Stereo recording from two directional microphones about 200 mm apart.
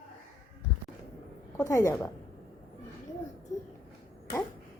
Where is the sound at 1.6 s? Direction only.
15° left (ahead or behind).